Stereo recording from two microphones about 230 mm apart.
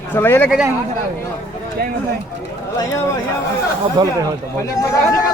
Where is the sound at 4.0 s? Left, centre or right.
Centre.